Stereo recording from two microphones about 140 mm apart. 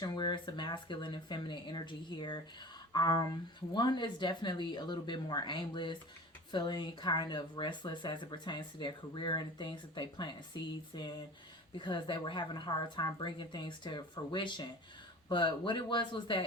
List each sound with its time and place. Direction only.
0.0 s speech: 30° left (ahead or behind)